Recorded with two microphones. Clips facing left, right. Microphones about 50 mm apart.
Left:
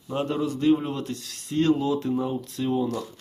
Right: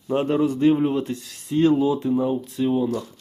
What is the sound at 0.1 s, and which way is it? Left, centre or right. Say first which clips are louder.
A man's voice: right 6 dB; right.